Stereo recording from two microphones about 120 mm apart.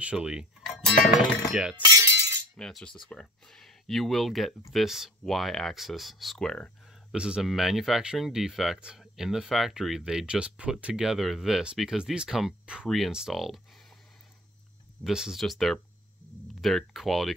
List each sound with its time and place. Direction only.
0.0 s speech: 10° right (ahead or behind)
1.9 s glass: 30° right (ahead or behind)
2.5 s speech: 5° left (ahead or behind)
7.2 s speech: 5° right (ahead or behind)
15.0 s speech: 5° right (ahead or behind)